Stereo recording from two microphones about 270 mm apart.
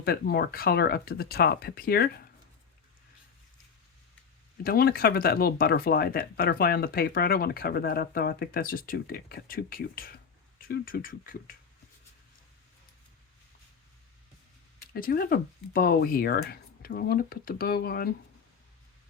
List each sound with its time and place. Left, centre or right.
0.0 s speech: left
4.6 s speech: left
14.9 s speech: left